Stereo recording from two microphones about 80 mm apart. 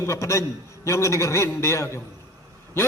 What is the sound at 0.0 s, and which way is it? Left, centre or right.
A man's voice, left.